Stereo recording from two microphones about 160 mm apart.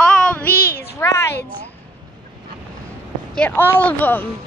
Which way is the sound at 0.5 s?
70° left (ahead or behind).